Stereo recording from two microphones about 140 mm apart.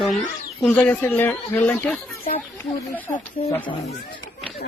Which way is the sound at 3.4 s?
40° left (ahead or behind).